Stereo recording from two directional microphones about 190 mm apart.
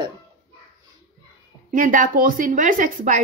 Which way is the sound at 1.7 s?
45° right (ahead or behind).